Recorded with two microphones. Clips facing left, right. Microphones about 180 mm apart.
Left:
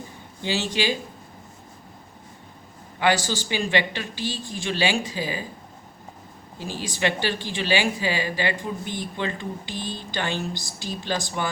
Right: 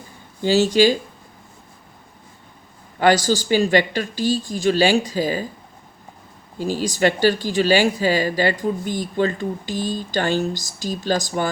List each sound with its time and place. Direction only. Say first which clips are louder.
0.4 s speech: right 10 dB; 40° right (ahead or behind)
3.0 s speech: right 6 dB; 40° right (ahead or behind)
6.6 s speech: right 7 dB; 40° right (ahead or behind)